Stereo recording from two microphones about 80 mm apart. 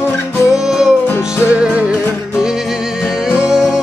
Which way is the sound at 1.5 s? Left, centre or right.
Centre.